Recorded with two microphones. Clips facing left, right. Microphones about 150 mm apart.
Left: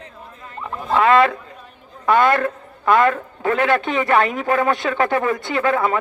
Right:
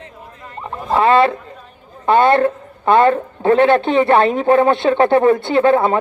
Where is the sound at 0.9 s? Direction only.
30° right (ahead or behind).